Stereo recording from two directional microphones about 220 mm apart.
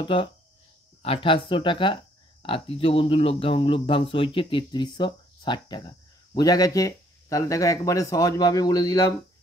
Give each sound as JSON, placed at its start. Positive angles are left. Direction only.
{"t": 0.0, "sound": "speech", "side_deg": 25}